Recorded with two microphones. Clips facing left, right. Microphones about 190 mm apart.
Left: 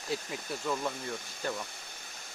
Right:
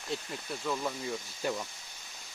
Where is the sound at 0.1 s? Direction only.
Centre (ahead or behind).